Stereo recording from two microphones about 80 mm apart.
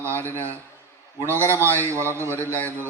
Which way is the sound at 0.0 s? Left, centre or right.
Right.